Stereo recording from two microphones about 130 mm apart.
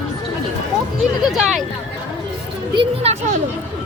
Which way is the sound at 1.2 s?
5° right (ahead or behind).